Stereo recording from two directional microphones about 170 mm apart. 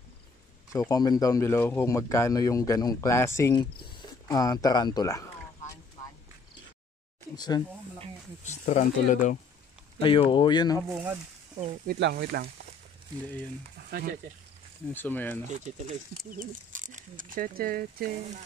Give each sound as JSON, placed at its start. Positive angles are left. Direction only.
{"t": 0.7, "sound": "speech", "side_deg": 20}
{"t": 7.3, "sound": "speech", "side_deg": 25}
{"t": 8.5, "sound": "speech", "side_deg": 45}
{"t": 9.9, "sound": "speech", "side_deg": 30}
{"t": 10.9, "sound": "speech", "side_deg": -15}
{"t": 11.9, "sound": "speech", "side_deg": -75}
{"t": 13.8, "sound": "speech", "side_deg": -60}
{"t": 14.9, "sound": "speech", "side_deg": 10}
{"t": 15.4, "sound": "speech", "side_deg": -45}